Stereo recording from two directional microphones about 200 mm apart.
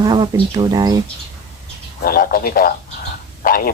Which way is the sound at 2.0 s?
45° left (ahead or behind).